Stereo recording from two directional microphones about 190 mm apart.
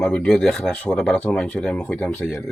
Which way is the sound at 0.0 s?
5° left (ahead or behind).